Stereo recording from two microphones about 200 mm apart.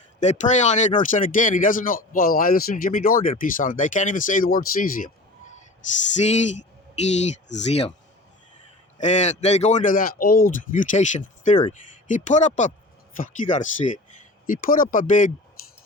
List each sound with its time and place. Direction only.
0.2 s speech: 35° left (ahead or behind)
7.0 s speech: 35° left (ahead or behind)
9.0 s speech: 35° left (ahead or behind)